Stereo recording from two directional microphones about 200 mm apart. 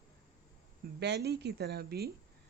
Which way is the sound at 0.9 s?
55° right (ahead or behind).